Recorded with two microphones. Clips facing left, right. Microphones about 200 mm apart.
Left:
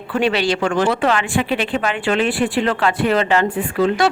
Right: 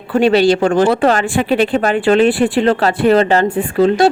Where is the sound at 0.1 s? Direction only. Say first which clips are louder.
Right 7 dB; 35° right (ahead or behind).